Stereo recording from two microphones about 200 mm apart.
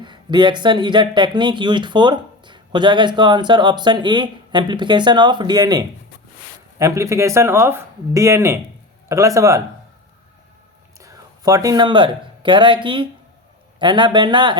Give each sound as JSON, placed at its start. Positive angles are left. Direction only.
{"t": 0.0, "sound": "speech", "side_deg": -20}
{"t": 11.0, "sound": "speech", "side_deg": -15}